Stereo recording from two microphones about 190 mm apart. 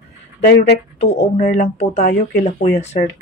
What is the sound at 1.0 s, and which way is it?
Speech, 35° left (ahead or behind).